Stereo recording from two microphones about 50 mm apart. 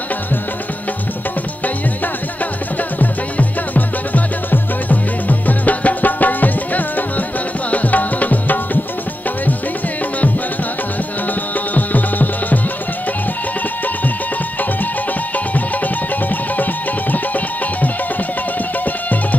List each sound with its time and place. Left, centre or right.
3.0 s music: left
11.7 s music: left
15.3 s music: left